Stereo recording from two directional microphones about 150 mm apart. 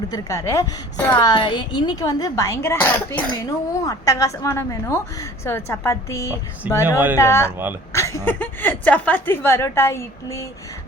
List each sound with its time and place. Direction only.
0.1 s a woman's voice: 20° left (ahead or behind)
1.2 s a woman's voice: 30° left (ahead or behind)